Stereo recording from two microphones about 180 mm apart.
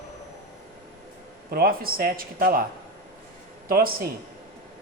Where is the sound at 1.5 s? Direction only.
55° right (ahead or behind).